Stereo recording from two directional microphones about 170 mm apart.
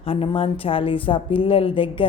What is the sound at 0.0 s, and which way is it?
A woman's voice, 35° left (ahead or behind).